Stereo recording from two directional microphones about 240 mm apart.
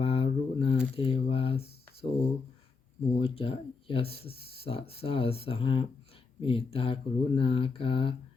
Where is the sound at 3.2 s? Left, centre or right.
Left.